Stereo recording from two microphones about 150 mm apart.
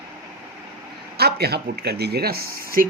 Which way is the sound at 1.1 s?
90° right.